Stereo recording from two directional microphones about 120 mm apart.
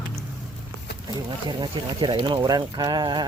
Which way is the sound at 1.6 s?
40° right (ahead or behind).